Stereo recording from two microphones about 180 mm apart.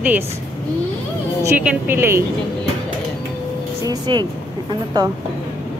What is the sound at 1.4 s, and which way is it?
Speech, 10° right (ahead or behind).